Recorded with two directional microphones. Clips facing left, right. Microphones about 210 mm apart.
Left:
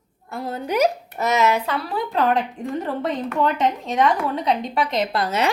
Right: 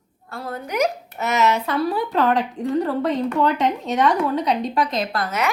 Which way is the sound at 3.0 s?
Centre (ahead or behind).